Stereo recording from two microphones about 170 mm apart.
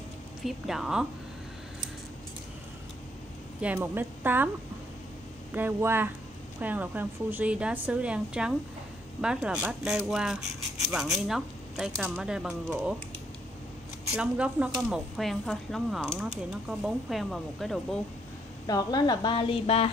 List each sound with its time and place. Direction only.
0.4 s speech: centre (ahead or behind)
3.6 s speech: 10° right (ahead or behind)
5.5 s speech: 10° right (ahead or behind)
14.1 s speech: 5° right (ahead or behind)
18.7 s speech: 25° left (ahead or behind)